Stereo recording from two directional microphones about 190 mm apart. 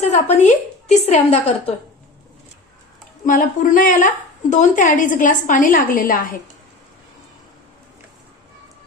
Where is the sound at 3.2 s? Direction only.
45° left (ahead or behind).